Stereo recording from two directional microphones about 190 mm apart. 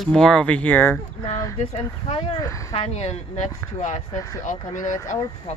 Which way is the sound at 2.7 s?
35° left (ahead or behind).